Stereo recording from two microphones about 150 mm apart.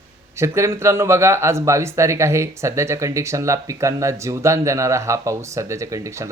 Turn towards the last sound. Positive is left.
turn(degrees=-20)  # may be behind; listen again after turning